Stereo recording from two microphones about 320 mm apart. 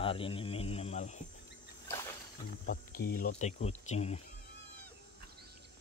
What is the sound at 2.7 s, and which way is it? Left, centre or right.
Speech, left.